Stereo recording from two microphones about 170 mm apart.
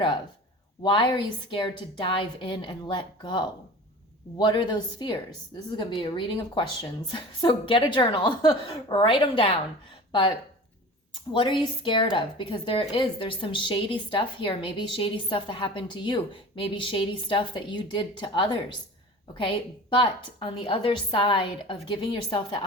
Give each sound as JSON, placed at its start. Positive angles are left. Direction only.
{"t": 0.8, "sound": "a woman's voice", "side_deg": 30}